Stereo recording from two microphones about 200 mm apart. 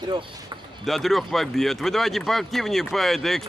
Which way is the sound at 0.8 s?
Centre (ahead or behind).